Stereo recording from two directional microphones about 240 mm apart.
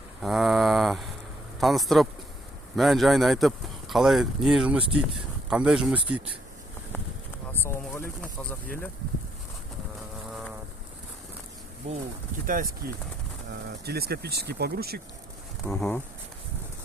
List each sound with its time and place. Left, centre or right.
0.2 s speech: centre
7.6 s speech: centre
11.9 s speech: right
12.8 s speech: right
15.6 s speech: centre